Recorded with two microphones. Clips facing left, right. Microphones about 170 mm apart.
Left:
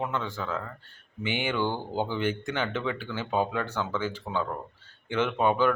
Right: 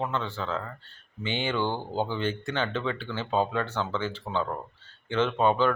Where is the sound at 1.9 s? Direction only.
15° left (ahead or behind).